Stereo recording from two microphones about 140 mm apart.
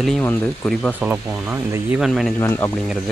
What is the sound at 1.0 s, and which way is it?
Speech, 10° right (ahead or behind).